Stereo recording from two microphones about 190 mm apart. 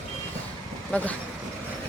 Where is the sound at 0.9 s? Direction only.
5° left (ahead or behind).